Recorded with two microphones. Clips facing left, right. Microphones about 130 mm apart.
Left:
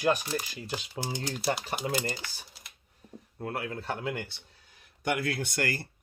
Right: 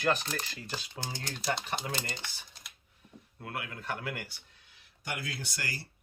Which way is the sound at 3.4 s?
40° left (ahead or behind).